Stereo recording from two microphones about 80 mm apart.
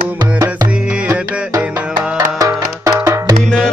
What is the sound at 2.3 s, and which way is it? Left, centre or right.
Music, right.